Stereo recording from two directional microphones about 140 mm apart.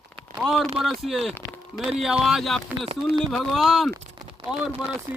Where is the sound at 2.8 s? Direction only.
35° right (ahead or behind).